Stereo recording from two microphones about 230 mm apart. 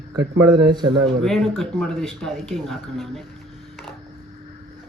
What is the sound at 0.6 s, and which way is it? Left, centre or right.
Speech, centre.